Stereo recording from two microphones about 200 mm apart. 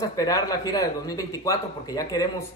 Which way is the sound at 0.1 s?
15° left (ahead or behind).